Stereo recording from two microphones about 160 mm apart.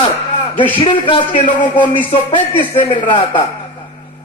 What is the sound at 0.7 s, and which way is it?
A man's voice, 35° left (ahead or behind).